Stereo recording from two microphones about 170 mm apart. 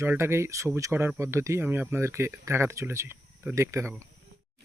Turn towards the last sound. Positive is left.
turn(degrees=-15)  # may be behind; listen again after turning